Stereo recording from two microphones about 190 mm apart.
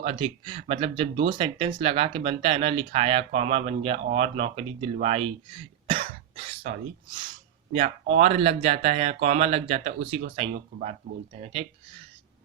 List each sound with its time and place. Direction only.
0.0 s speech: 25° right (ahead or behind)
7.7 s speech: 35° right (ahead or behind)